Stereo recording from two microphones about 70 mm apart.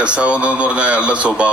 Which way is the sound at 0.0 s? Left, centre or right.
Centre.